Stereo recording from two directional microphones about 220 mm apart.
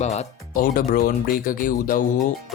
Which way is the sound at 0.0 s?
30° left (ahead or behind).